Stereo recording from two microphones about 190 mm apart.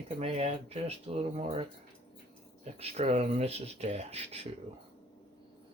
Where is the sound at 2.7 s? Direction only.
35° right (ahead or behind).